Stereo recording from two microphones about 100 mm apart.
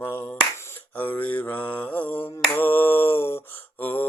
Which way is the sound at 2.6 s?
20° left (ahead or behind).